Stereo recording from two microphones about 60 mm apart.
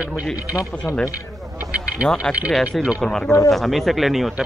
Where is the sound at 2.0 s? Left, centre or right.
Centre.